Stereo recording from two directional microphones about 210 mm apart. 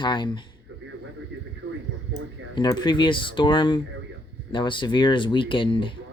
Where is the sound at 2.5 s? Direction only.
20° left (ahead or behind).